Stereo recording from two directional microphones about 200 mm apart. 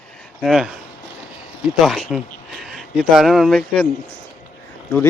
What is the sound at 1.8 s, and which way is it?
Speech, centre (ahead or behind).